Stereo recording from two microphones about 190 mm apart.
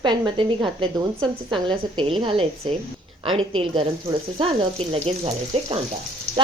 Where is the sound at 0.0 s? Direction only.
25° right (ahead or behind).